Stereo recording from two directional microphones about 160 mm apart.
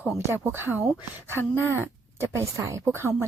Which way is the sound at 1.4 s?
15° left (ahead or behind).